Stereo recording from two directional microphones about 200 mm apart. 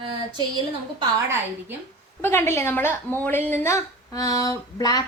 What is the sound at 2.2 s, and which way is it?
A woman's voice, 10° left (ahead or behind).